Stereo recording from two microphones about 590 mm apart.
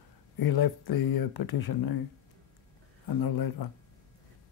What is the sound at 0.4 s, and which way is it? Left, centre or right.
Speech, left.